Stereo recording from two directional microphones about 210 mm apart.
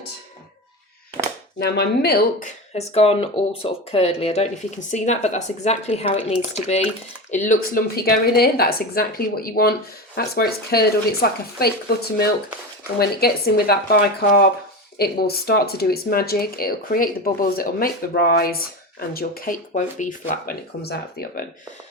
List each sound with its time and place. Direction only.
1.5 s speech: 50° left (ahead or behind)
2.7 s speech: 30° left (ahead or behind)
7.3 s speech: 35° left (ahead or behind)
13.0 s speech: 50° left (ahead or behind)